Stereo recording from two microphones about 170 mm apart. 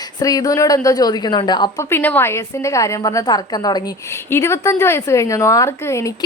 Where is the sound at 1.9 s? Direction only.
10° left (ahead or behind).